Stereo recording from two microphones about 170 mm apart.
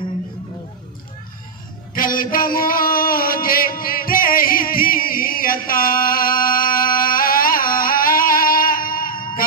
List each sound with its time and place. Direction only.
2.0 s music: 55° left (ahead or behind)